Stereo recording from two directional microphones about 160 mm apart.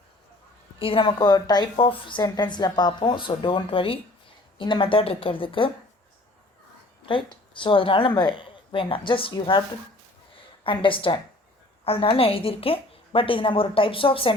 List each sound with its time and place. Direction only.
0.8 s a woman's voice: 35° left (ahead or behind)
7.0 s a woman's voice: 30° left (ahead or behind)